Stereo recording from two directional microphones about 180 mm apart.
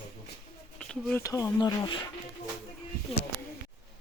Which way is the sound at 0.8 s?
5° left (ahead or behind).